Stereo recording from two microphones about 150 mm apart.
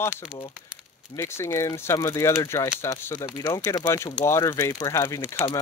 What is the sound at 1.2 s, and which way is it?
Speech, 15° left (ahead or behind).